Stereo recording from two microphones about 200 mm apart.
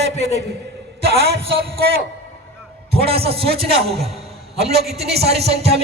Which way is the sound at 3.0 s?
30° right (ahead or behind).